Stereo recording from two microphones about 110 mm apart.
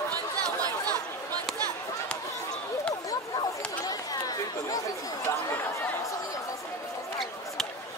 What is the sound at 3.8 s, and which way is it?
Chatter, 35° left (ahead or behind).